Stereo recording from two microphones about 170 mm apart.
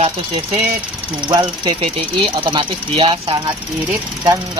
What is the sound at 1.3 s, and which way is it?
Speech, 25° right (ahead or behind).